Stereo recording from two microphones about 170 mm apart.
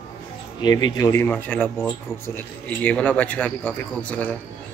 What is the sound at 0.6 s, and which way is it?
Speech, 25° left (ahead or behind).